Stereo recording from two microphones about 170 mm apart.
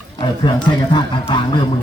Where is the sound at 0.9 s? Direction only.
25° left (ahead or behind).